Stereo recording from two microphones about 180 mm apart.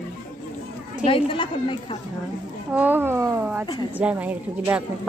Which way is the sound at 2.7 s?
10° right (ahead or behind).